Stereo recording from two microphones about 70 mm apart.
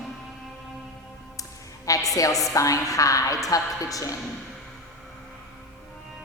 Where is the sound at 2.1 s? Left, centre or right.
Left.